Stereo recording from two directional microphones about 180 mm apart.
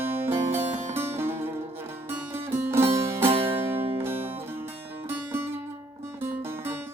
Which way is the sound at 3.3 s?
30° right (ahead or behind).